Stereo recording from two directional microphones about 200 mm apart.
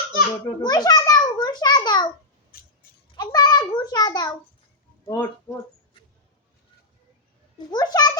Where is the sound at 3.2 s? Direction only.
20° left (ahead or behind).